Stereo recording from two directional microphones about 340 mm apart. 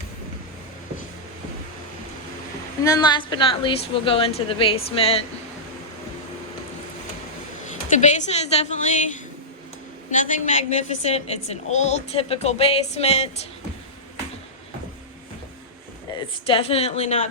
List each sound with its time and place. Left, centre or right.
2.8 s a woman's voice: centre
7.9 s a woman's voice: left
16.5 s a woman's voice: centre